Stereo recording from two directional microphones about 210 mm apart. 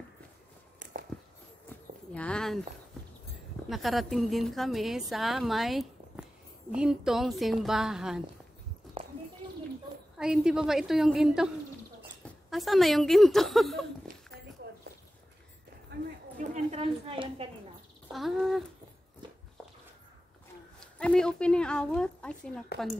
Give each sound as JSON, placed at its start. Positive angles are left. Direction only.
{"t": 2.1, "sound": "speech", "side_deg": 5}
{"t": 3.6, "sound": "a woman's voice", "side_deg": 0}
{"t": 9.0, "sound": "a sound", "side_deg": -25}
{"t": 10.1, "sound": "a woman's voice", "side_deg": -5}
{"t": 14.1, "sound": "dog", "side_deg": -40}
{"t": 15.9, "sound": "a sound", "side_deg": -35}
{"t": 18.1, "sound": "speech", "side_deg": 0}
{"t": 20.8, "sound": "a woman's voice", "side_deg": 5}